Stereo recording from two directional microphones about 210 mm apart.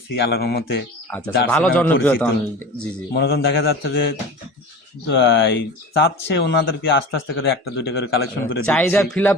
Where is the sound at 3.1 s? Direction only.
50° left (ahead or behind).